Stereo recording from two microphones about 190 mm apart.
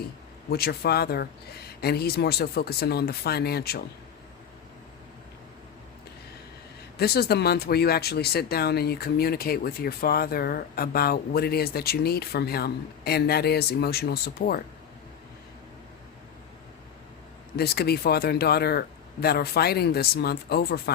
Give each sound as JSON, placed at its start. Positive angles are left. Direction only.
{"t": 0.5, "sound": "speech", "side_deg": 55}
{"t": 7.0, "sound": "speech", "side_deg": 55}
{"t": 17.6, "sound": "speech", "side_deg": 55}